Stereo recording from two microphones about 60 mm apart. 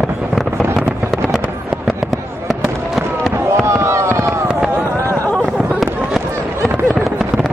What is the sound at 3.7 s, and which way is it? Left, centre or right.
Fireworks, right.